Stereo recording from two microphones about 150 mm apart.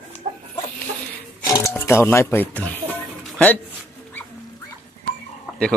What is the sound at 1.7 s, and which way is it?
Speech, 15° left (ahead or behind).